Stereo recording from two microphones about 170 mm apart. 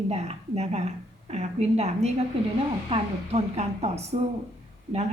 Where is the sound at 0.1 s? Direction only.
40° right (ahead or behind).